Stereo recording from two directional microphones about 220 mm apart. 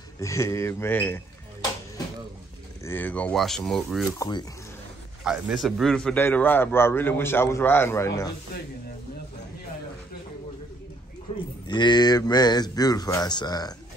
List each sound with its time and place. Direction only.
0.2 s a man's voice: 15° left (ahead or behind)
2.8 s speech: 10° left (ahead or behind)
4.2 s speech: 20° left (ahead or behind)
5.2 s a man's voice: 5° right (ahead or behind)
11.3 s speech: 25° left (ahead or behind)